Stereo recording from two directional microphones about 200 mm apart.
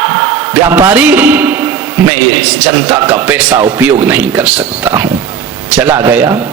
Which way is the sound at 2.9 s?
10° right (ahead or behind).